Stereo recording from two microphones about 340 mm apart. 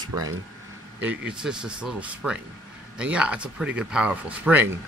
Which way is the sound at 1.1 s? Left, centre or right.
Centre.